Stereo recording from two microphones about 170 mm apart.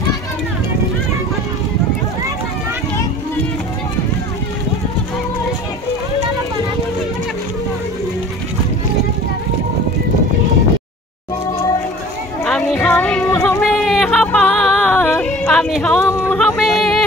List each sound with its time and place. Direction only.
11.5 s children playing: 20° left (ahead or behind)
12.4 s music: 5° left (ahead or behind)
13.6 s music: centre (ahead or behind)
16.3 s a sound: centre (ahead or behind)